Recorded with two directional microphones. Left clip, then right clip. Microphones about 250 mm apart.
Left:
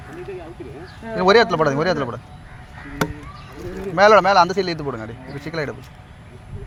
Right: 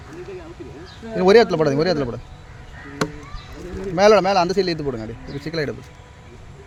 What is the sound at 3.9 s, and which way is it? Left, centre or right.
Speech, right.